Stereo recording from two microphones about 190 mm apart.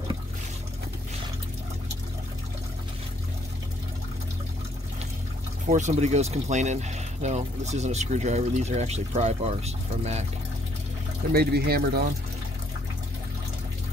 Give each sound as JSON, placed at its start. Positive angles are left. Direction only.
{"t": 5.7, "sound": "speech", "side_deg": -40}
{"t": 11.3, "sound": "speech", "side_deg": -55}